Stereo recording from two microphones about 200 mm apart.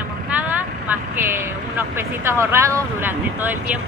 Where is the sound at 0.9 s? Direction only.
10° right (ahead or behind).